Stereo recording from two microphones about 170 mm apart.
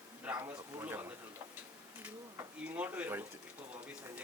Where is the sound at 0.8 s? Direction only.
15° right (ahead or behind).